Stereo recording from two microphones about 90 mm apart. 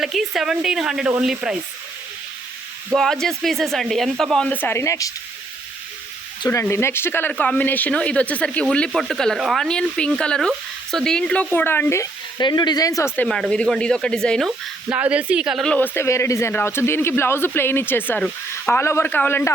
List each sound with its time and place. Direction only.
0.0 s speech: 5° right (ahead or behind)
2.9 s speech: 5° left (ahead or behind)
4.4 s speech: 20° left (ahead or behind); by 5.1 s 40° left (ahead or behind)
6.5 s speech: 30° left (ahead or behind); by 8.6 s 15° left (ahead or behind)
9.0 s speech: 5° left (ahead or behind)
11.5 s speech: 20° left (ahead or behind)
12.4 s speech: 55° left (ahead or behind)
13.2 s speech: 5° left (ahead or behind)
14.8 s speech: 15° right (ahead or behind)
15.8 s speech: 30° left (ahead or behind)